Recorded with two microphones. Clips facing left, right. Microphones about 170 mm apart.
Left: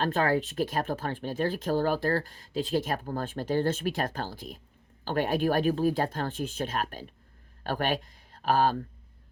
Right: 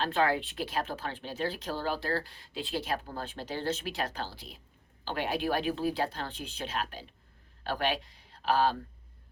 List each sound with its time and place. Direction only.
0.0 s speech: 45° left (ahead or behind)